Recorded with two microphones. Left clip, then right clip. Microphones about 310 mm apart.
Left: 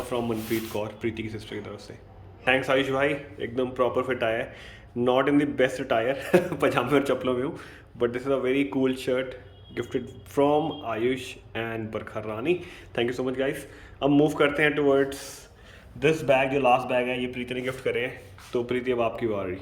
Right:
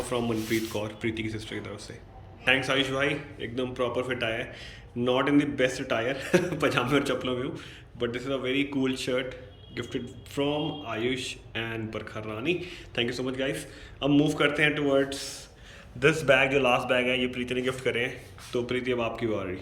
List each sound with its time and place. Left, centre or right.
0.1 s a man's voice: centre